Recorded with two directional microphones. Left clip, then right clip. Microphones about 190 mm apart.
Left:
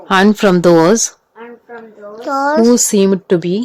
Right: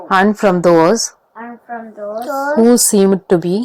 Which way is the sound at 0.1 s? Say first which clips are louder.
Left 1 dB; 30° left (ahead or behind).